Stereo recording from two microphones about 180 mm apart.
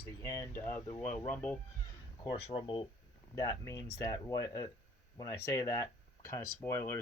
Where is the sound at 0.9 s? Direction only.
5° left (ahead or behind).